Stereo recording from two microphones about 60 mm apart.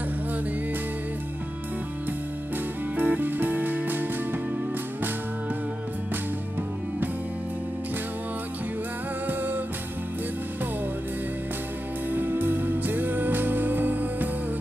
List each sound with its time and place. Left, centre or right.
3.0 s music: right
12.1 s music: right